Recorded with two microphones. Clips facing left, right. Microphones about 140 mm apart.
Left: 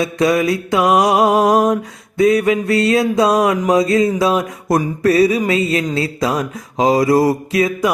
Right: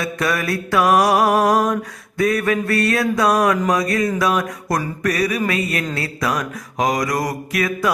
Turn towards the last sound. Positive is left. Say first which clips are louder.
# left 5 dB
turn(degrees=25)  # may be behind; listen again after turning